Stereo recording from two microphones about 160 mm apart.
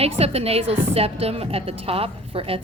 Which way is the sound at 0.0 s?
40° right (ahead or behind).